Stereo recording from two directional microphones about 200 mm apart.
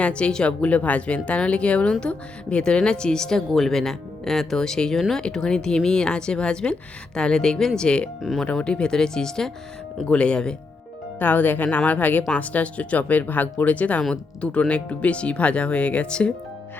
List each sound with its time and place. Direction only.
0.0 s speech: 5° left (ahead or behind)